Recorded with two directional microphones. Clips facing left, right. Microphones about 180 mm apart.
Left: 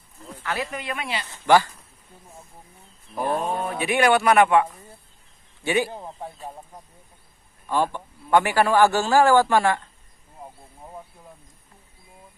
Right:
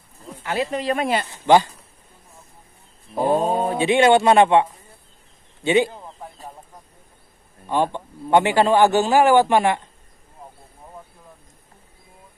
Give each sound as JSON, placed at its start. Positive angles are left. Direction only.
{"t": 0.4, "sound": "speech", "side_deg": -30}
{"t": 1.3, "sound": "a man's voice", "side_deg": -20}
{"t": 3.2, "sound": "a man's voice", "side_deg": -30}
{"t": 5.9, "sound": "a sound", "side_deg": 25}
{"t": 7.6, "sound": "a man's voice", "side_deg": -20}